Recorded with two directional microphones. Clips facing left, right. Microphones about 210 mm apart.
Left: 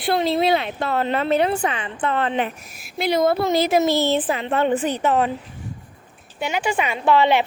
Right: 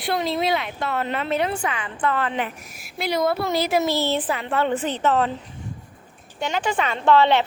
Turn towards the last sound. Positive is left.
turn(degrees=10)  # may be behind; listen again after turning